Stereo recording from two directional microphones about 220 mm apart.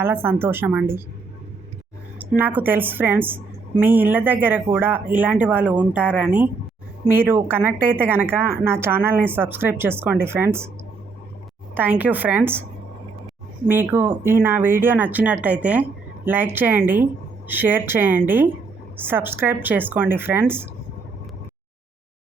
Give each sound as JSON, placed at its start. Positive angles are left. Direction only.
{"t": 0.0, "sound": "a woman's voice", "side_deg": -10}
{"t": 2.4, "sound": "a woman's voice", "side_deg": -10}
{"t": 11.7, "sound": "a woman's voice", "side_deg": -10}
{"t": 13.7, "sound": "a woman's voice", "side_deg": -10}